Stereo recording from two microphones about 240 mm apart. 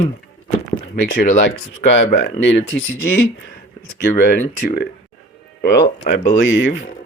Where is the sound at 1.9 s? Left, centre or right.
Left.